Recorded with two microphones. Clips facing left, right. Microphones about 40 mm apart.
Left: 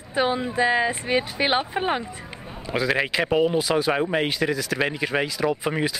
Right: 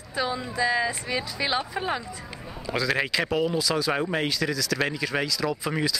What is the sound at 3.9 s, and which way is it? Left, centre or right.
Speech, centre.